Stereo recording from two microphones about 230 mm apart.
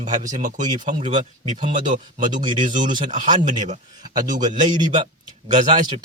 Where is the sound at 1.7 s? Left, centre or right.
Right.